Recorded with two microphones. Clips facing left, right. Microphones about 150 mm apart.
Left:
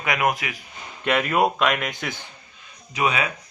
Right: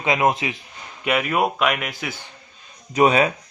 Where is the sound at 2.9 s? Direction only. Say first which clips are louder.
Right 7 dB; 40° right (ahead or behind).